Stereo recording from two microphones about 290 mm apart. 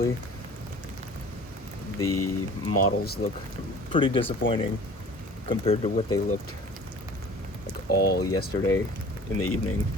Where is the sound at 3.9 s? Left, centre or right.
Centre.